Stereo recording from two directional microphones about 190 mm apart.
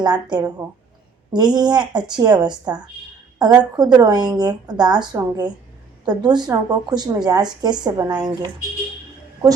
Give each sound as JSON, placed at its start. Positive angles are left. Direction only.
{"t": 0.0, "sound": "a woman's voice", "side_deg": -20}